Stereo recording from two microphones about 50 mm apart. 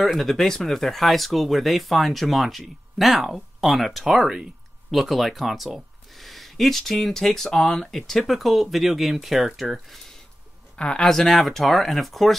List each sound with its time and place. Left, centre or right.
0.0 s speech: centre
10.8 s speech: centre
11.1 s speech: centre